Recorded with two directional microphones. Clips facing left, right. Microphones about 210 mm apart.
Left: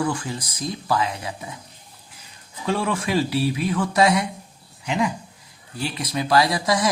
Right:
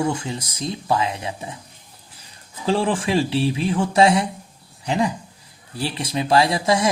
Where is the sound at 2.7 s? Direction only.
30° right (ahead or behind).